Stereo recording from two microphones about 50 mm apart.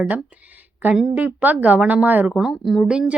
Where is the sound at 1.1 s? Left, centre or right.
Right.